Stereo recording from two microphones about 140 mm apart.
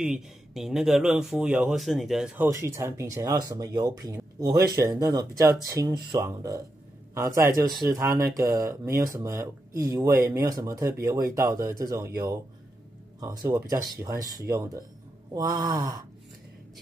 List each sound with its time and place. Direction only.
0.0 s speech: 5° right (ahead or behind); by 16.0 s 30° right (ahead or behind)